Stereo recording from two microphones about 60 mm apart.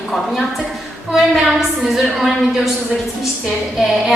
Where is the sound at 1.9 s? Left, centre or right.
Centre.